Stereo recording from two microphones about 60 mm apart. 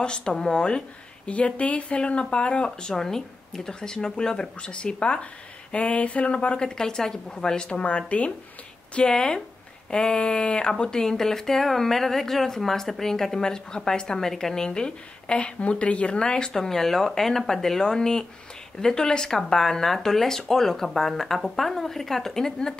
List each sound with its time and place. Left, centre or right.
0.0 s a woman's voice: centre